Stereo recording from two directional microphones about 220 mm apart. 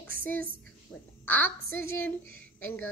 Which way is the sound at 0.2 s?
10° left (ahead or behind).